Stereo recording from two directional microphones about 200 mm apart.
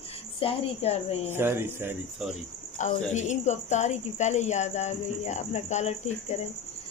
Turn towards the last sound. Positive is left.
turn(degrees=35)  # may be behind; listen again after turning